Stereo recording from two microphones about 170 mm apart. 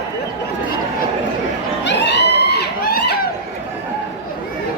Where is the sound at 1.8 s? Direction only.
90° left; by 3.3 s 60° left (ahead or behind).